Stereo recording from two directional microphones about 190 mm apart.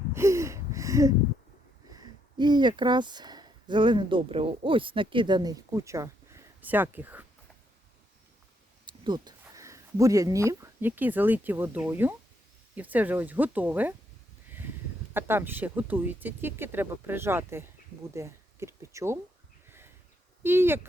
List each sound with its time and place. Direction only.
0.1 s a sound: 15° right (ahead or behind)
1.9 s speech: 20° right (ahead or behind)
8.9 s a sound: 25° right (ahead or behind)
9.4 s speech: 15° right (ahead or behind)
15.1 s speech: 10° right (ahead or behind)
20.4 s speech: 10° right (ahead or behind)